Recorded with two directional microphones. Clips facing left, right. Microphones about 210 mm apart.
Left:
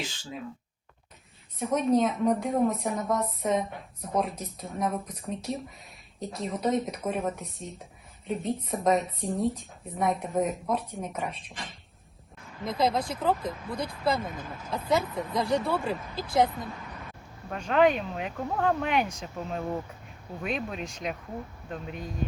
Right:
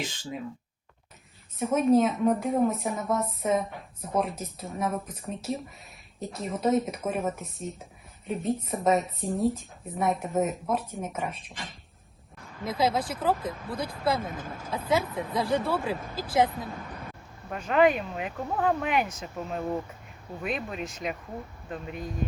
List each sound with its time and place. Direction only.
1.5 s a woman's voice: centre (ahead or behind)
14.3 s speech: 45° right (ahead or behind)
14.7 s a woman's voice: centre (ahead or behind)